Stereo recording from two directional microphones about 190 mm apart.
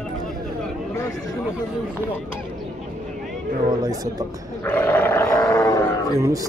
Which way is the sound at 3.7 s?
20° right (ahead or behind).